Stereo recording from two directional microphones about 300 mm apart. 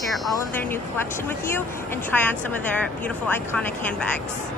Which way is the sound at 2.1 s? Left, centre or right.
Centre.